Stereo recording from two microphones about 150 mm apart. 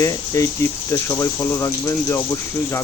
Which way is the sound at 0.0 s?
20° left (ahead or behind).